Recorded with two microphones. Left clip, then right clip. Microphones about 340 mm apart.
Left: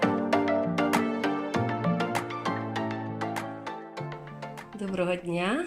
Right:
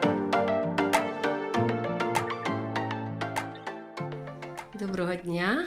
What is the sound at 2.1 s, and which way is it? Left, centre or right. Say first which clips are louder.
Music: right 1 dB; centre.